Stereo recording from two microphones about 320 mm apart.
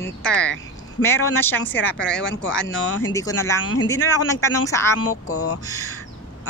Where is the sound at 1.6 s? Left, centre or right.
Centre.